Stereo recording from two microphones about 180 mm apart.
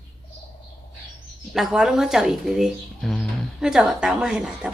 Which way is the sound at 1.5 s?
5° right (ahead or behind).